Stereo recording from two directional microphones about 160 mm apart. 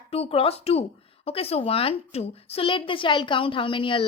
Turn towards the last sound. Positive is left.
turn(degrees=30)  # may be behind; listen again after turning